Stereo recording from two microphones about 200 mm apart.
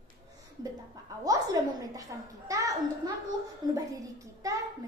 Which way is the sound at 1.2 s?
20° right (ahead or behind).